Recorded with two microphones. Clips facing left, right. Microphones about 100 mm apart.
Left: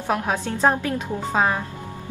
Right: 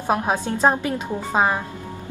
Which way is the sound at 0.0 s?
20° right (ahead or behind).